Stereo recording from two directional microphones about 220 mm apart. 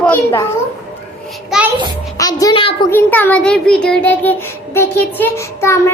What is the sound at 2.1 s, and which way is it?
Speech, 15° left (ahead or behind).